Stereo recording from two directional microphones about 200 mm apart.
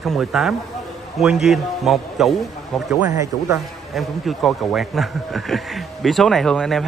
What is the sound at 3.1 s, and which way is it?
Speech, 15° right (ahead or behind).